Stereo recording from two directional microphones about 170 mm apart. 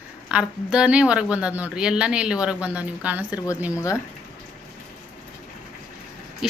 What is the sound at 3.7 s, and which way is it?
Speech, 20° left (ahead or behind).